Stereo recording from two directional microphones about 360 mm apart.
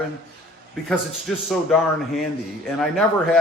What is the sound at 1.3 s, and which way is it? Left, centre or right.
Speech, centre.